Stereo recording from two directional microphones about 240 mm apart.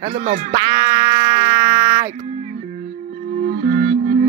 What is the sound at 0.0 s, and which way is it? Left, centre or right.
Speech, right.